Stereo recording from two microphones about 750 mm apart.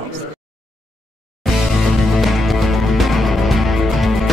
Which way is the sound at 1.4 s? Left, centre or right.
Centre.